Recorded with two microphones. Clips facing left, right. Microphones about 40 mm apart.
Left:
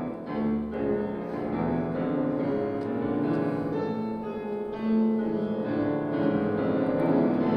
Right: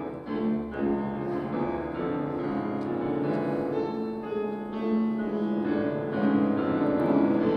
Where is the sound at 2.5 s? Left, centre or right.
Right.